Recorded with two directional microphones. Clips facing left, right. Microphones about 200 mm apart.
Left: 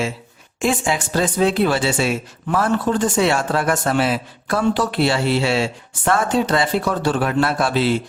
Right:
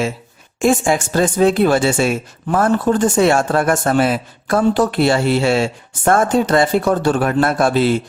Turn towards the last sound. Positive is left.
turn(degrees=-50)  # may be behind; listen again after turning